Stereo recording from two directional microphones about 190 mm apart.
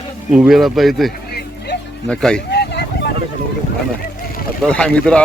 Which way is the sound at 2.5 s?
60° left (ahead or behind).